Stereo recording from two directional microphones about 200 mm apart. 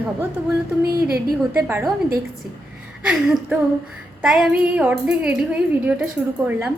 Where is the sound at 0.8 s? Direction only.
50° right (ahead or behind).